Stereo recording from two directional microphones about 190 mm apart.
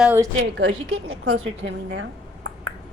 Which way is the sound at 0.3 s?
70° right (ahead or behind).